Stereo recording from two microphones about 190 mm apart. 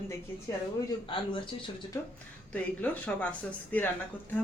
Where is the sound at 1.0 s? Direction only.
25° left (ahead or behind).